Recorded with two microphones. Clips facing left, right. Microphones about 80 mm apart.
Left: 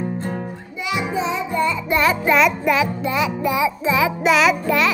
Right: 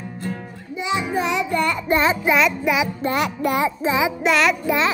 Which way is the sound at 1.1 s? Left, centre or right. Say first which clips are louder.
Right 1 dB; right.